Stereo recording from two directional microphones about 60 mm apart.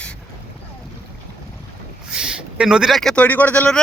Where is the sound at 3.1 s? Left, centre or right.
Left.